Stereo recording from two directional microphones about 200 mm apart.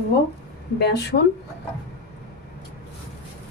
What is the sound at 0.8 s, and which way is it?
Speech, 55° left (ahead or behind).